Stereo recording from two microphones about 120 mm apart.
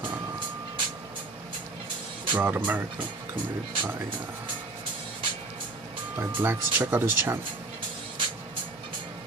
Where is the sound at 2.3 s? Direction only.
15° right (ahead or behind).